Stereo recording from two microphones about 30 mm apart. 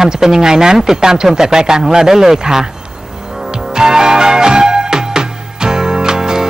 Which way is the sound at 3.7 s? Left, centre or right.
Right.